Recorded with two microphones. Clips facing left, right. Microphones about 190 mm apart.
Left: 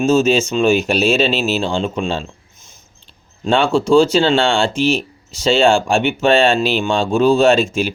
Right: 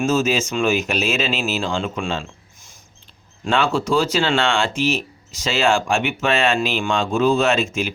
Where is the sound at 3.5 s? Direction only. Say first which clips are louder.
Left 6 dB; 30° left (ahead or behind).